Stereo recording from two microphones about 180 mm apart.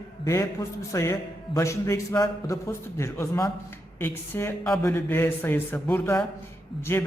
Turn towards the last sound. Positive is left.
turn(degrees=15)  # may be behind; listen again after turning